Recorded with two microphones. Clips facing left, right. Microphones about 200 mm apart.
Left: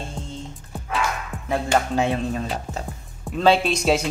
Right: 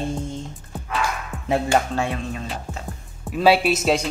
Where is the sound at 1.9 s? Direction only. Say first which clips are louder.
Left 3 dB; 20° left (ahead or behind).